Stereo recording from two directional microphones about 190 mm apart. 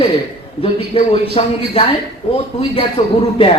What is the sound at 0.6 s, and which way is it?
Speech, 30° left (ahead or behind).